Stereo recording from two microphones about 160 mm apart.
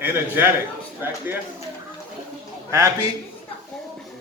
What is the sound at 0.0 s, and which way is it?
A man's voice, 15° right (ahead or behind).